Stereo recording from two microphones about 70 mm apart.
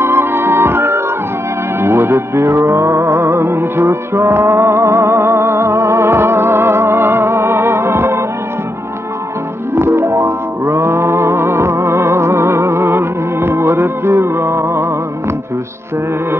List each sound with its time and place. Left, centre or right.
0.0 s music: right
9.8 s music: right